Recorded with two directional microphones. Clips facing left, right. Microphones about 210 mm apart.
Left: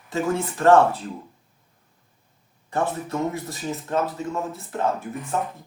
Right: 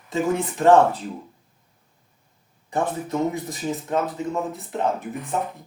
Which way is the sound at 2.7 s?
15° right (ahead or behind).